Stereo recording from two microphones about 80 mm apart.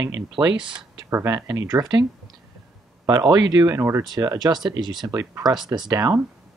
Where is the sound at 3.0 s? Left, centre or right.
Right.